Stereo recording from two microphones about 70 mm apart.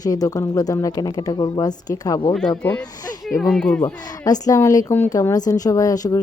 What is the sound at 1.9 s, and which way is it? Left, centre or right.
Speech, left.